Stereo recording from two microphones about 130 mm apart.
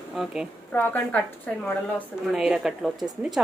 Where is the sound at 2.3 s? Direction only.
5° right (ahead or behind).